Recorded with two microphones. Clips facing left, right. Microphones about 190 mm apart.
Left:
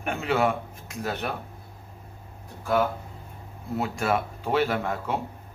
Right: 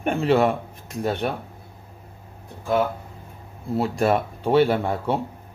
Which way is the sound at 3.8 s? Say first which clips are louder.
Right 5 dB; 35° right (ahead or behind).